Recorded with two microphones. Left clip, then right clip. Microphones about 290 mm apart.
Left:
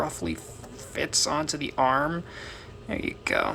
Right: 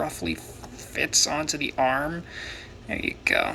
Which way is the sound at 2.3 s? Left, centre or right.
Left.